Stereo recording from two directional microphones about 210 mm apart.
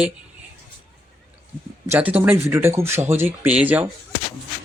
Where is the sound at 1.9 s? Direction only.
10° right (ahead or behind).